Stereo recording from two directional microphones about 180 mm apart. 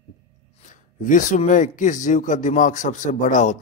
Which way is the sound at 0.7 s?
45° left (ahead or behind).